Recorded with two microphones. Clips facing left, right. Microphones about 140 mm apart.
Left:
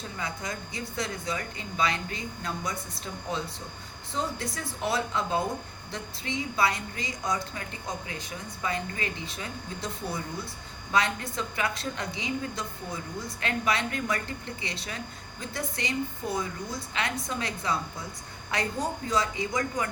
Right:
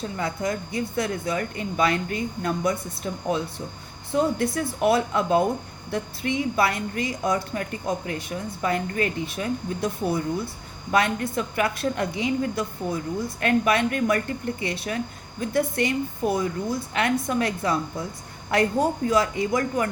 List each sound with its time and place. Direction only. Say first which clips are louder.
0.2 s speech: right 8 dB; 55° right (ahead or behind)